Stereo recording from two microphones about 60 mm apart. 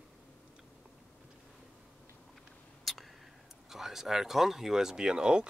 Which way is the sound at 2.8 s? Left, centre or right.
Centre.